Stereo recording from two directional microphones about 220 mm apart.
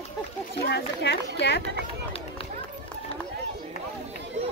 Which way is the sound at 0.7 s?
50° left (ahead or behind).